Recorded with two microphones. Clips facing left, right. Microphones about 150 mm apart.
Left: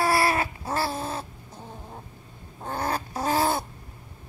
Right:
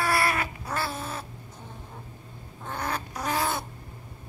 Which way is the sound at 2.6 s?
35° left (ahead or behind).